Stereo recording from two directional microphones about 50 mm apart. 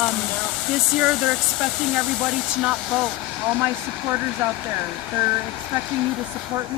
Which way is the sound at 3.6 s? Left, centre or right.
Right.